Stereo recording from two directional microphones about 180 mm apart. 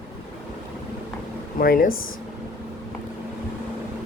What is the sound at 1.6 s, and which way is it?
Speech, 50° left (ahead or behind).